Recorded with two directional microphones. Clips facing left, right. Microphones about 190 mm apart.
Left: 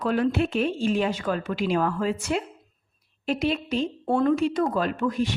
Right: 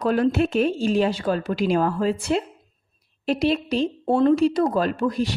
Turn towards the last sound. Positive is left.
turn(degrees=-35)  # may be behind; listen again after turning